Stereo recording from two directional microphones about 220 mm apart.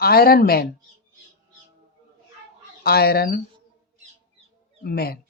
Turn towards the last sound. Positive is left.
turn(degrees=45)  # may be behind; listen again after turning